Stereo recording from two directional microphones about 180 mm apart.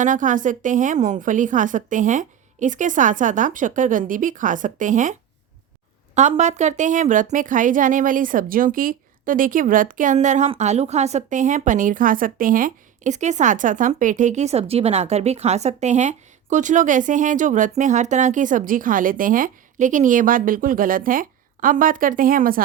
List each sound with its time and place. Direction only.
0.0 s a woman's voice: 45° right (ahead or behind)
6.1 s a woman's voice: 40° right (ahead or behind)